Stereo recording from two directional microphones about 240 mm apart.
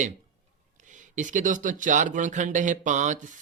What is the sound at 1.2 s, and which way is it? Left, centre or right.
Speech, right.